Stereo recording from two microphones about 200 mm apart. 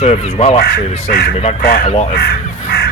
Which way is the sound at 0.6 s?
50° left (ahead or behind).